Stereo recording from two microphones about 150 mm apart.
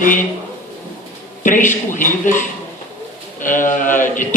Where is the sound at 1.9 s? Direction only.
60° left (ahead or behind).